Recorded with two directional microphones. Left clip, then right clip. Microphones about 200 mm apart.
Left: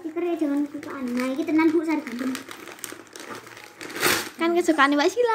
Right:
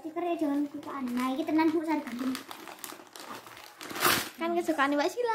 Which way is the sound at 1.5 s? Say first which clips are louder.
Left 7 dB; 10° right (ahead or behind).